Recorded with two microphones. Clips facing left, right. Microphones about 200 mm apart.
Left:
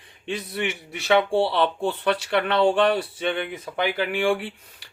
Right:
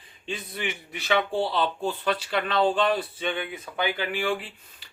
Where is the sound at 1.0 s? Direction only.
70° left (ahead or behind).